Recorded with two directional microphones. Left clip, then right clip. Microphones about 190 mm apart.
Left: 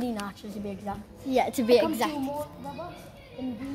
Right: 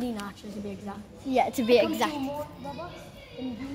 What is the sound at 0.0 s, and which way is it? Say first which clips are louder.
Speech: left 1 dB; 55° left (ahead or behind).